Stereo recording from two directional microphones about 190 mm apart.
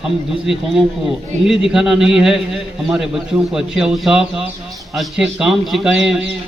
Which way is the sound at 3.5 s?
5° right (ahead or behind).